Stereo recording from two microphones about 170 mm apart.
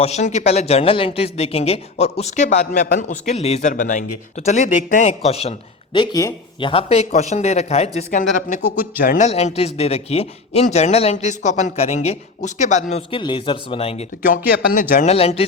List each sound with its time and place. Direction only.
0.0 s speech: 40° left (ahead or behind)
8.4 s speech: 50° left (ahead or behind)
13.1 s speech: 30° left (ahead or behind)
14.2 s a man's voice: 55° left (ahead or behind)
15.1 s speech: 35° left (ahead or behind)